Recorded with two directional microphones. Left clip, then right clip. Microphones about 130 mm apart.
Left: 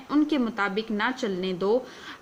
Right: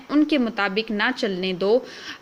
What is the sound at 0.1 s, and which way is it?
A woman's voice, 20° right (ahead or behind).